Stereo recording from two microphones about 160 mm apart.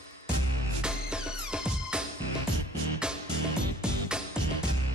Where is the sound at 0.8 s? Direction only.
5° right (ahead or behind).